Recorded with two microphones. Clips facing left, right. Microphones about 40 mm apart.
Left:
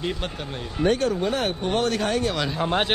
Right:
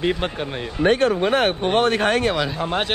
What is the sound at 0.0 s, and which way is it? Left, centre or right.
Speech, right.